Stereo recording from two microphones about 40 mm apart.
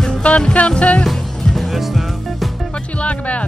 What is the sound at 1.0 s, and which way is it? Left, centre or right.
Music, centre.